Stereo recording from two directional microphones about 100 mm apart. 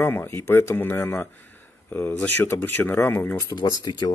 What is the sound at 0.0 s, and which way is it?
Speech, 25° left (ahead or behind).